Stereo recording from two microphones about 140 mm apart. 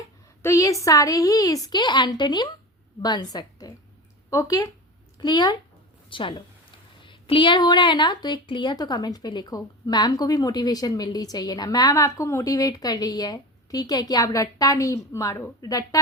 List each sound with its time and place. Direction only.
0.4 s a woman's voice: 20° left (ahead or behind)